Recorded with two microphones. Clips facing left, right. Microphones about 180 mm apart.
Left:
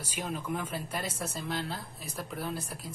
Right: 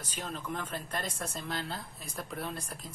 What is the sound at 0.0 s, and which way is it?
Speech, 10° left (ahead or behind).